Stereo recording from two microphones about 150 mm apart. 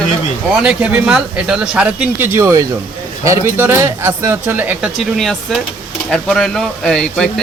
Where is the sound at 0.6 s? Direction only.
5° right (ahead or behind).